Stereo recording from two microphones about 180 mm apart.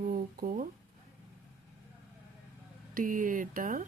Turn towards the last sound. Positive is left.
turn(degrees=-50)  # may be behind; listen again after turning